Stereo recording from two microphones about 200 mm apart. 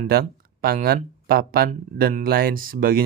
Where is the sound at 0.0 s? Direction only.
50° right (ahead or behind).